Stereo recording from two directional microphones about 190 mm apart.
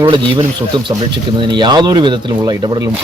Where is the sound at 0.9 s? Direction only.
25° right (ahead or behind).